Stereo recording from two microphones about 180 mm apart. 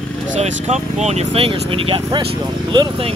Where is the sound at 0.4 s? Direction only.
40° right (ahead or behind).